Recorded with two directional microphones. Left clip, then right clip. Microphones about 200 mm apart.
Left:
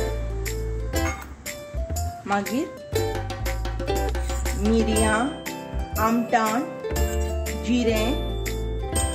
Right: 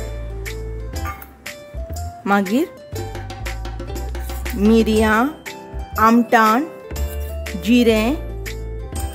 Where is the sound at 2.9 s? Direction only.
Centre (ahead or behind).